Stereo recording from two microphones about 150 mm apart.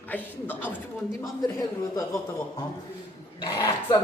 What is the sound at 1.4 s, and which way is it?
Speech, 25° left (ahead or behind).